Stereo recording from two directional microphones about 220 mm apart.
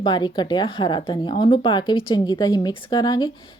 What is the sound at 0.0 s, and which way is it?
Speech, 20° left (ahead or behind).